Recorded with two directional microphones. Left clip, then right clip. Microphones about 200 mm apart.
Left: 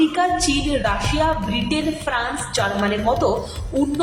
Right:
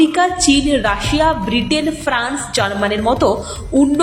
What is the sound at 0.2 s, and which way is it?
A woman's voice, 20° right (ahead or behind).